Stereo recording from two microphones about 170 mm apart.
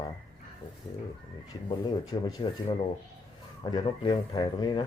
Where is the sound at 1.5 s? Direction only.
25° left (ahead or behind).